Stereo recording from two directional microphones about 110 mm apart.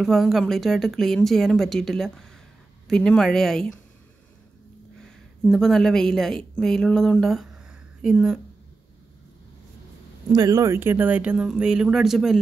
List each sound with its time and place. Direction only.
0.0 s speech: centre (ahead or behind)
5.5 s a woman's voice: 5° left (ahead or behind)
10.3 s speech: 35° right (ahead or behind)
10.7 s speech: 20° right (ahead or behind); by 12.4 s centre (ahead or behind)